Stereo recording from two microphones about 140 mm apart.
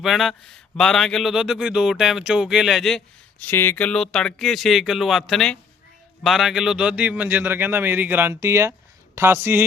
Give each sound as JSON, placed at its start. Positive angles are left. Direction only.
{"t": 0.0, "sound": "speech", "side_deg": 0}
{"t": 3.4, "sound": "a man's voice", "side_deg": 15}